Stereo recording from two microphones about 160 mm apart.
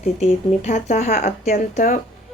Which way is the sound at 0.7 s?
55° left (ahead or behind).